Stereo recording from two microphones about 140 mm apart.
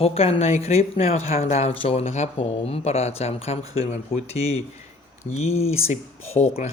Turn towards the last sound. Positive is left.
turn(degrees=50)  # may be behind; listen again after turning